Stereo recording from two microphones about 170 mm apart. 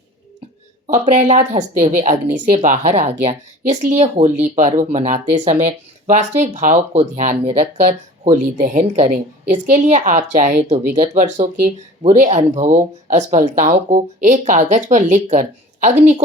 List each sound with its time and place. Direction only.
0.9 s speech: 45° right (ahead or behind)